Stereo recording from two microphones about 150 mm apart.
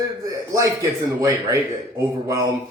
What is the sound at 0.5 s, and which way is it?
Speech, 20° right (ahead or behind).